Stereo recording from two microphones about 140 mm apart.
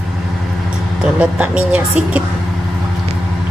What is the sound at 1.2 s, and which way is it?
A woman's voice, 10° right (ahead or behind).